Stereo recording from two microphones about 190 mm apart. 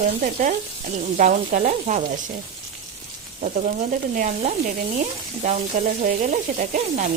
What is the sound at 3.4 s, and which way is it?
Sizzle, 40° right (ahead or behind).